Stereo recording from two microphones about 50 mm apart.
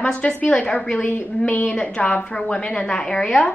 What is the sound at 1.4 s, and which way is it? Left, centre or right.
A woman's voice, left.